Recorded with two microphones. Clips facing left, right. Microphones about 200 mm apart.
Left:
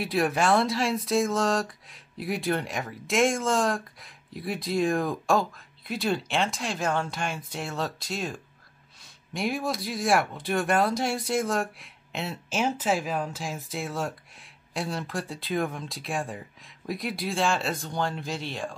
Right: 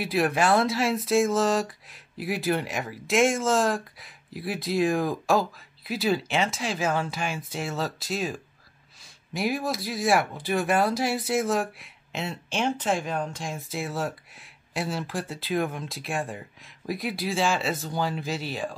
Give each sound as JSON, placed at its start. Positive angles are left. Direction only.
{"t": 0.0, "sound": "speech", "side_deg": 0}